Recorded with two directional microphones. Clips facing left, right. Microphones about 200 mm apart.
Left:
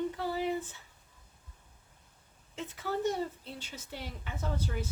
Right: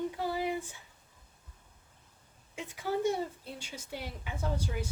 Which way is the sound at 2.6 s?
10° right (ahead or behind).